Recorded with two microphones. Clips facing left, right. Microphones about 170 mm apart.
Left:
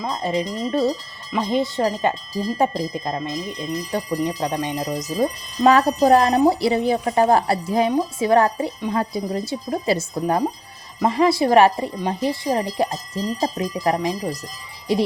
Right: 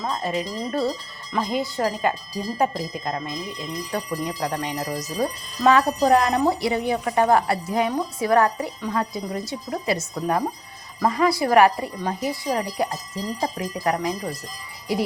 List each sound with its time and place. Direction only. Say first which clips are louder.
0.0 s speech: left 3 dB; 20° left (ahead or behind)
5.6 s a woman's voice: left 3 dB; 35° left (ahead or behind)